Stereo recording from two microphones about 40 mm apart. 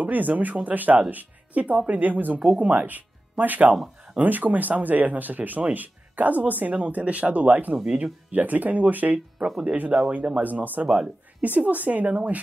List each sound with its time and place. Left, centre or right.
0.0 s speech: right